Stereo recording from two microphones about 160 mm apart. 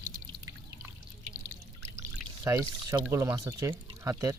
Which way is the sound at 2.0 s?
15° right (ahead or behind).